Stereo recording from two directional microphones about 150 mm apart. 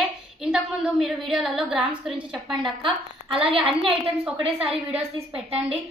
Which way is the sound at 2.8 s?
35° right (ahead or behind).